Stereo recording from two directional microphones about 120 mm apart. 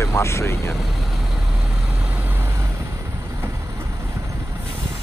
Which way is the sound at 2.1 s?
15° right (ahead or behind).